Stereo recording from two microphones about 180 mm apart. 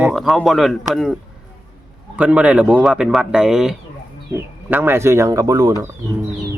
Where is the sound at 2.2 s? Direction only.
5° right (ahead or behind).